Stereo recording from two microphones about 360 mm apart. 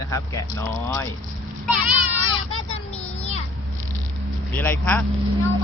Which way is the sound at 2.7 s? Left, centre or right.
Centre.